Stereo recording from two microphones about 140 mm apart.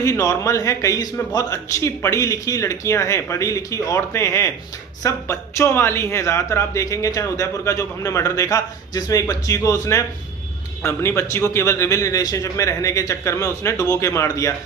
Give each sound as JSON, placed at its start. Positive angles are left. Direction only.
{"t": 0.0, "sound": "a man's voice", "side_deg": 20}